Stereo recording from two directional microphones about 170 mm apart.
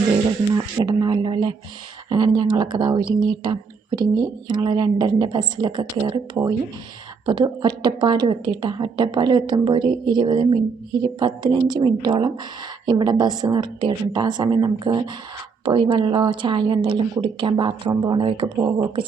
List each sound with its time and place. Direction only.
0.5 s speech: 20° right (ahead or behind)